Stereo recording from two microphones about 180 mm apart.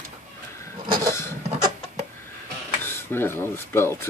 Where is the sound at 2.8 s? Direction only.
15° left (ahead or behind).